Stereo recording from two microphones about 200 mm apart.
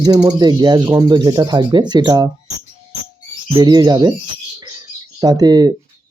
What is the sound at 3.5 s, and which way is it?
Speech, 20° right (ahead or behind).